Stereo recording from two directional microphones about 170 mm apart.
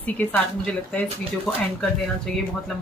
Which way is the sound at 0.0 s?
10° left (ahead or behind).